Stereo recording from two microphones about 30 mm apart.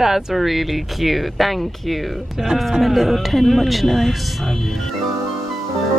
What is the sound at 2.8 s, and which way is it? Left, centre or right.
Speech, centre.